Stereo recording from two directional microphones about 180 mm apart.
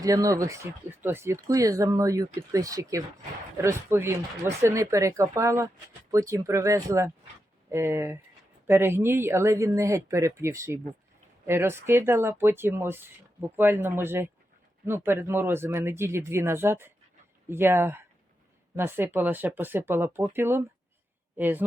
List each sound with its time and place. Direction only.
0.0 s speech: 20° right (ahead or behind)